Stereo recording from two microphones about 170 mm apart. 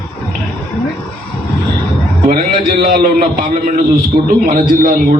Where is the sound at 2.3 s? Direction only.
60° right (ahead or behind).